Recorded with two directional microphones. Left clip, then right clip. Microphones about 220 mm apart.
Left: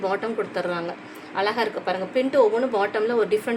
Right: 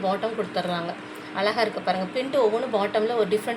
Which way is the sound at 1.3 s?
30° left (ahead or behind).